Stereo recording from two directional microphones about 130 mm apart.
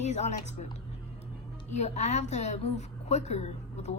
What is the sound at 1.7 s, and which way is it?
A woman's voice, 60° left (ahead or behind).